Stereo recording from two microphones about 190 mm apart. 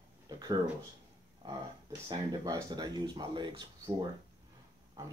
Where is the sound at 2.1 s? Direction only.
25° right (ahead or behind).